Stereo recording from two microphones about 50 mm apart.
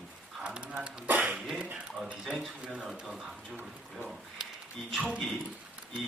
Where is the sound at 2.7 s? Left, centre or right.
Centre.